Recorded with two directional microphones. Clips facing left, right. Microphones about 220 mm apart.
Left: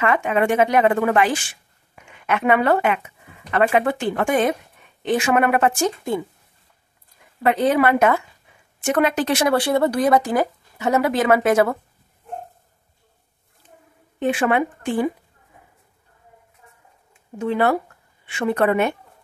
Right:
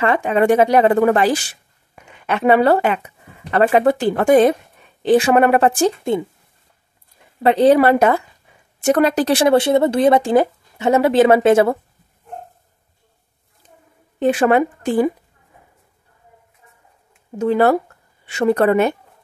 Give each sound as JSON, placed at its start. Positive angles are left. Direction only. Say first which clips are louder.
{"t": 0.0, "sound": "speech", "louder": "right 3 dB", "side_deg": -35}
{"t": 7.4, "sound": "speech", "louder": "right 6 dB", "side_deg": -30}
{"t": 14.2, "sound": "speech", "louder": "right 5 dB", "side_deg": -40}
{"t": 17.4, "sound": "speech", "louder": "right 5 dB", "side_deg": -40}